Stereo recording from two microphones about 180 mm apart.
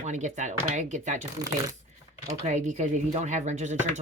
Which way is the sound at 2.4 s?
40° right (ahead or behind).